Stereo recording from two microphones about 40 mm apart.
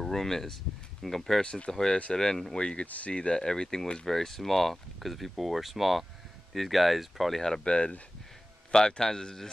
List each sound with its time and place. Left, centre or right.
0.0 s a man's voice: centre
1.4 s speech: left
1.7 s a man's voice: centre
7.4 s a man's voice: centre